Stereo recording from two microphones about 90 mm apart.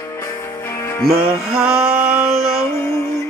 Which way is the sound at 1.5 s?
10° right (ahead or behind).